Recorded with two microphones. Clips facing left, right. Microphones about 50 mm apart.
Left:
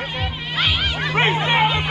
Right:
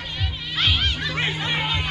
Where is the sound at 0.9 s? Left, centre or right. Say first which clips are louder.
Left 7 dB; left.